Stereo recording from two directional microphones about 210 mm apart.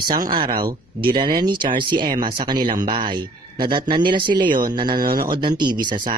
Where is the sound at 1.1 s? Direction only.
20° right (ahead or behind).